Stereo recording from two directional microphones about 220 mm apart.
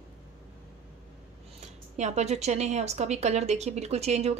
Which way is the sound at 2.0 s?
30° right (ahead or behind).